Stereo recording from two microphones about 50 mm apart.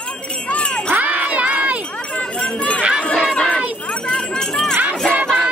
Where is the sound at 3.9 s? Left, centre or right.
Centre.